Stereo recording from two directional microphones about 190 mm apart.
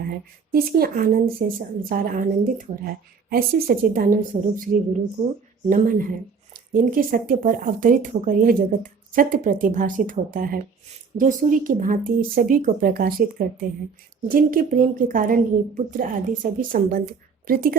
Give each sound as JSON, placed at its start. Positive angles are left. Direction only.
{"t": 0.5, "sound": "speech", "side_deg": -50}